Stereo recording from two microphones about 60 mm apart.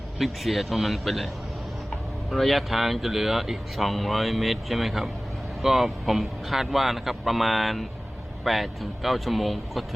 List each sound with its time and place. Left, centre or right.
0.2 s speech: centre
2.3 s speech: centre